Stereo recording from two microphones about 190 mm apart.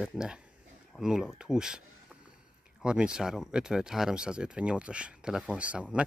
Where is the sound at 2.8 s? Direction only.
5° right (ahead or behind).